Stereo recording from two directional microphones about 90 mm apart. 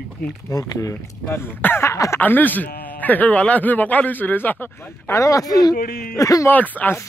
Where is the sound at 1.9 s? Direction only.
35° left (ahead or behind).